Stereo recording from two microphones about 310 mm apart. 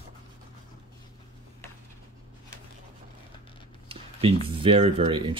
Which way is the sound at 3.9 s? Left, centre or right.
Centre.